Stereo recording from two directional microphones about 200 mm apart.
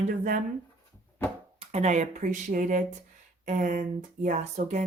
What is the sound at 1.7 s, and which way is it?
Speech, 35° right (ahead or behind).